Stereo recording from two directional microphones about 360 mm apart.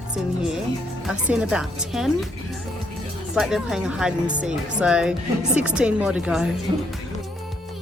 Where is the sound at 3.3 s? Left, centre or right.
Centre.